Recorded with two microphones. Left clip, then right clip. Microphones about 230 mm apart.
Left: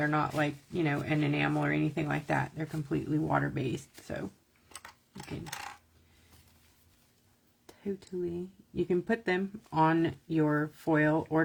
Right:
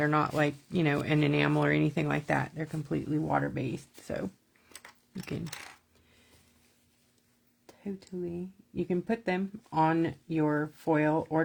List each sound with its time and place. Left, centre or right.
0.0 s speech: right
7.7 s speech: centre